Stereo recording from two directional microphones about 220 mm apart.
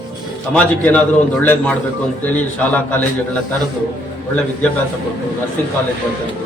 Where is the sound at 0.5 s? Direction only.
5° left (ahead or behind).